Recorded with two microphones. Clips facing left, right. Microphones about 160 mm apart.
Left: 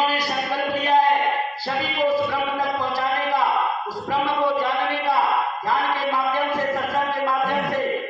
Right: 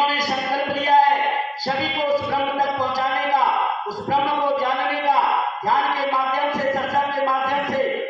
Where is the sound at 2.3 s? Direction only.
40° right (ahead or behind).